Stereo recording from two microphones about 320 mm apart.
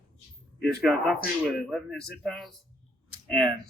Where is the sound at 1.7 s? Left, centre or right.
Centre.